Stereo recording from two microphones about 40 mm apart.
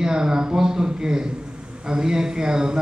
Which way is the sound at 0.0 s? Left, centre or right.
Centre.